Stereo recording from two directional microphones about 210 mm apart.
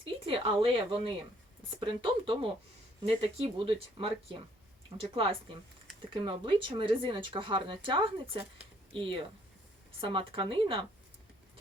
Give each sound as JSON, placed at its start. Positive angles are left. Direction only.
{"t": 0.0, "sound": "speech", "side_deg": -25}